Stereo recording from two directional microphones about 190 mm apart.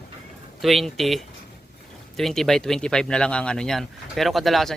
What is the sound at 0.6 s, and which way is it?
Speech, centre (ahead or behind).